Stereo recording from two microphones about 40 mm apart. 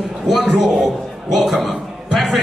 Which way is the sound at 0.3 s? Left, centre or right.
Centre.